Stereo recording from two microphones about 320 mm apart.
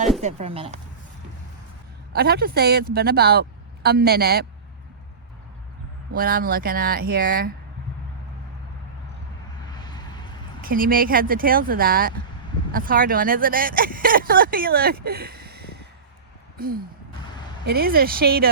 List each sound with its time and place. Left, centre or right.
0.2 s speech: centre
2.1 s speech: right
6.1 s speech: right
9.7 s a sound: centre
10.6 s speech: right
17.7 s speech: right